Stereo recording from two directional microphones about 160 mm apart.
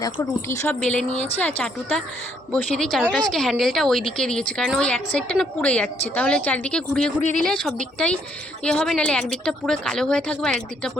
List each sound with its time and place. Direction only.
0.2 s a woman's voice: 15° left (ahead or behind)